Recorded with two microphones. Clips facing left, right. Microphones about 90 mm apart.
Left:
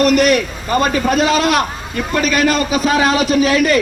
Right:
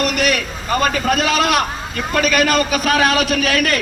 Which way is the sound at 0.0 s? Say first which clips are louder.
Left 7 dB; 40° left (ahead or behind).